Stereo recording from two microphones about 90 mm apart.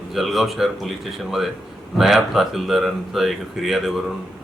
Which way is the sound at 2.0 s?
5° right (ahead or behind).